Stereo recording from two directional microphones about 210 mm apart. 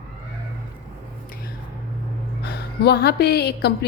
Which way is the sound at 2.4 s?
50° left (ahead or behind).